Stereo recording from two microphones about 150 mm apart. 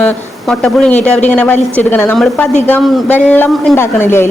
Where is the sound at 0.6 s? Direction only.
5° left (ahead or behind).